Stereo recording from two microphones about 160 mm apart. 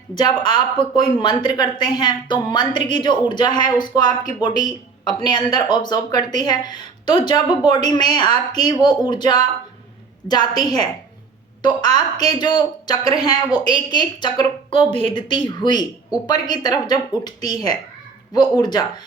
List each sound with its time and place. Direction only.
0.1 s speech: 30° left (ahead or behind)